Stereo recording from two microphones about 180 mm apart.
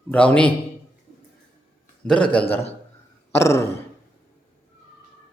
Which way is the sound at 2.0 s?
5° left (ahead or behind).